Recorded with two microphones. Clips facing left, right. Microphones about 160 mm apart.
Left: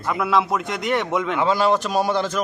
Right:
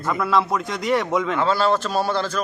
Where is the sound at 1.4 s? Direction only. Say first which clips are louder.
Left 3 dB; 15° left (ahead or behind).